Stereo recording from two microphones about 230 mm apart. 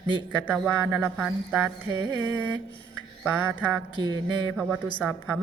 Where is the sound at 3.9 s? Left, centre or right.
Centre.